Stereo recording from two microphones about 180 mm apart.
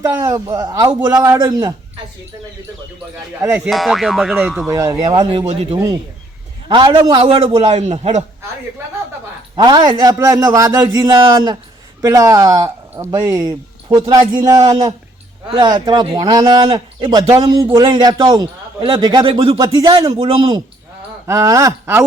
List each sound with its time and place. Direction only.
0.0 s speech: 15° right (ahead or behind)
3.7 s speech: centre (ahead or behind); by 7.3 s 20° right (ahead or behind)
7.3 s a man's voice: 30° right (ahead or behind)
9.6 s speech: 25° right (ahead or behind)
21.2 s speech: 20° right (ahead or behind)